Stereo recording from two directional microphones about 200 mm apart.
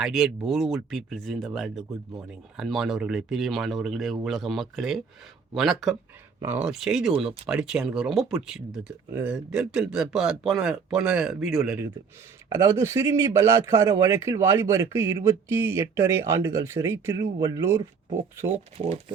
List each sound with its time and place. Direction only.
0.0 s speech: centre (ahead or behind)
12.5 s a man's voice: 15° right (ahead or behind)
18.5 s speech: 30° right (ahead or behind)